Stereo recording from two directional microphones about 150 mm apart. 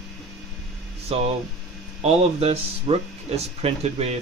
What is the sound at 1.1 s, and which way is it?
Speech, 45° right (ahead or behind).